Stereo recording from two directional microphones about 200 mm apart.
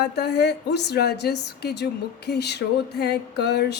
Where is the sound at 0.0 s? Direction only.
55° left (ahead or behind).